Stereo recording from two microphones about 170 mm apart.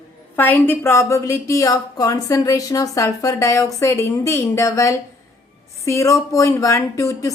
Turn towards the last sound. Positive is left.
turn(degrees=20)  # may be behind; listen again after turning